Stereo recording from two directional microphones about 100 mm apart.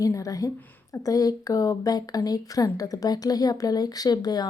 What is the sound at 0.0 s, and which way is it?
Speech, 35° left (ahead or behind).